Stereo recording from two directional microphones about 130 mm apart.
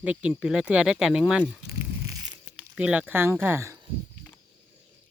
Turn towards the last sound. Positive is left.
turn(degrees=-20)  # may be behind; listen again after turning